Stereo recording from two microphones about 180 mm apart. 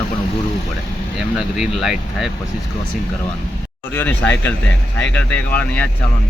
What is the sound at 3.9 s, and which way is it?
Speech, 10° left (ahead or behind).